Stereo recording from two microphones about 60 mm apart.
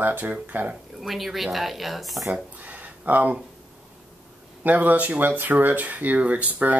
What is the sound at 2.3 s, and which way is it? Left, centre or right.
Speech, right.